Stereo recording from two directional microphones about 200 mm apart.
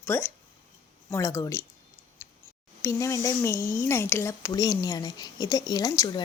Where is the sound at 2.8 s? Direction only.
15° left (ahead or behind).